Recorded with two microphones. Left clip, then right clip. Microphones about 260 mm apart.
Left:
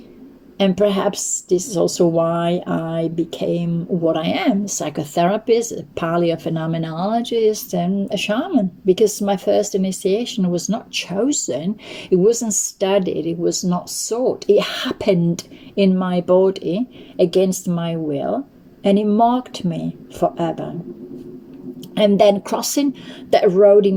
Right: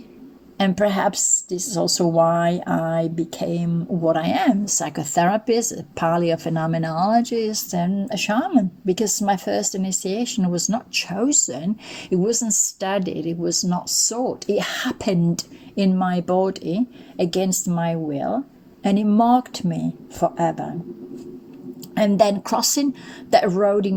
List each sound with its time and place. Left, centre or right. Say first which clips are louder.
0.6 s a woman's voice: left 3 dB; right
2.7 s speech: right 1 dB; right
3.0 s a woman's voice: left 2 dB; right
6.3 s speech: even; right
6.8 s a woman's voice: right 3 dB; right
21.9 s a woman's voice: left 4 dB; right